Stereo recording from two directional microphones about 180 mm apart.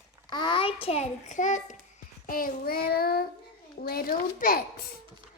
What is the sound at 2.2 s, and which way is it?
Child singing, 50° left (ahead or behind).